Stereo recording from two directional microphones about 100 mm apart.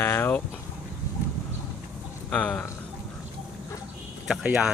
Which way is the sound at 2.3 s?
10° left (ahead or behind).